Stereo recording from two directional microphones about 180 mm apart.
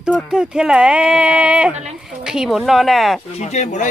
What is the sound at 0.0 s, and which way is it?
Speech, 5° right (ahead or behind).